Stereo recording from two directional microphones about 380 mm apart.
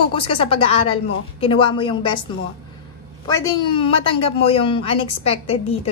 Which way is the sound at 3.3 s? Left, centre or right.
Centre.